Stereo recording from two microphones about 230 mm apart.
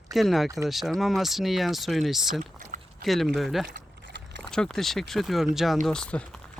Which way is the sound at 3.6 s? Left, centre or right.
Right.